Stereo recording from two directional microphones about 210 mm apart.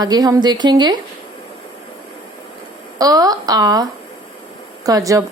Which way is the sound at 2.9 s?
15° right (ahead or behind).